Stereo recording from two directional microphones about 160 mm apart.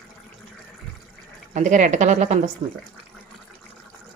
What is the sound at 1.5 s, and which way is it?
Speech, 50° right (ahead or behind).